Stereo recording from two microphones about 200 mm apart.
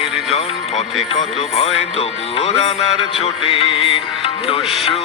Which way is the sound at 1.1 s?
30° left (ahead or behind).